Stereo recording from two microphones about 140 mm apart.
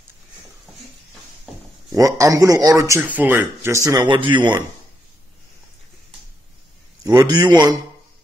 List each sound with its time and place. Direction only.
2.0 s speech: 25° right (ahead or behind)
3.1 s speech: 10° right (ahead or behind)
4.0 s speech: 35° right (ahead or behind)
7.1 s speech: 30° right (ahead or behind)